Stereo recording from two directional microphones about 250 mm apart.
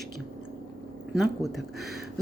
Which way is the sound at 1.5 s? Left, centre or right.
Centre.